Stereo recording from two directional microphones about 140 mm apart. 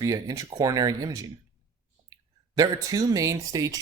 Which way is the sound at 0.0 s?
25° right (ahead or behind).